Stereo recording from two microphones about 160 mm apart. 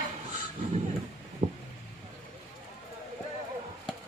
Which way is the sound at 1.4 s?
40° right (ahead or behind).